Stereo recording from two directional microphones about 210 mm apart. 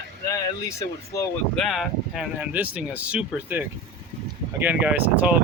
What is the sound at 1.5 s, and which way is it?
Speech, centre (ahead or behind).